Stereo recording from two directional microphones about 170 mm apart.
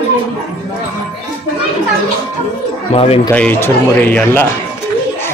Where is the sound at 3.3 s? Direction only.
10° left (ahead or behind).